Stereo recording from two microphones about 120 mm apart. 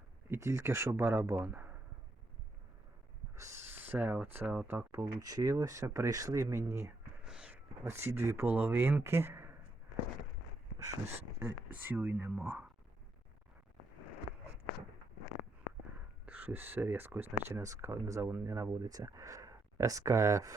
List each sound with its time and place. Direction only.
0.3 s speech: 25° right (ahead or behind)
3.3 s speech: 25° right (ahead or behind)
7.3 s a sound: 10° right (ahead or behind)
7.9 s speech: 20° right (ahead or behind)
11.1 s speech: 15° right (ahead or behind)
16.2 s speech: 15° right (ahead or behind)